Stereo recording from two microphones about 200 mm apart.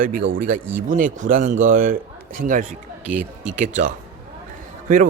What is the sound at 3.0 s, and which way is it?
Speech, 5° right (ahead or behind).